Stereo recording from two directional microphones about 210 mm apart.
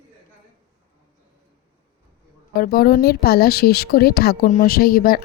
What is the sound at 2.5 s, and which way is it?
A woman's voice, 45° left (ahead or behind).